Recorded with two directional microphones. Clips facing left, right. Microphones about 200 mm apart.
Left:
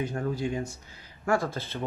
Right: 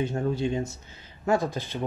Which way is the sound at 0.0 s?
25° right (ahead or behind).